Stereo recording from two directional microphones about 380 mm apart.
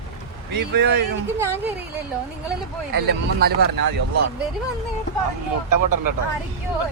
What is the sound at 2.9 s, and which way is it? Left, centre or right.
Speech, right.